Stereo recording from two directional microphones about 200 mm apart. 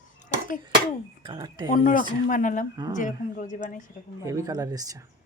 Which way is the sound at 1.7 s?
45° left (ahead or behind).